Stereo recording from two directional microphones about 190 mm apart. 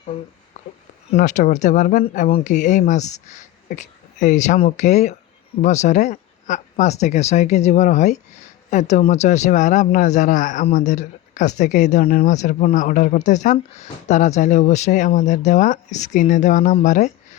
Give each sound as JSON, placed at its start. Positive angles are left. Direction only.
{"t": 1.1, "sound": "a man's voice", "side_deg": 40}